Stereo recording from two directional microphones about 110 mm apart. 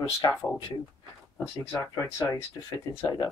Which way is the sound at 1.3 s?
20° left (ahead or behind).